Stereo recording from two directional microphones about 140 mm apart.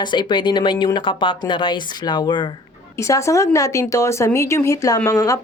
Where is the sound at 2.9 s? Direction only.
20° left (ahead or behind).